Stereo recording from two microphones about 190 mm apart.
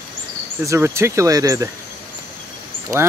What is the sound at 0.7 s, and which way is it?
Speech, 15° right (ahead or behind).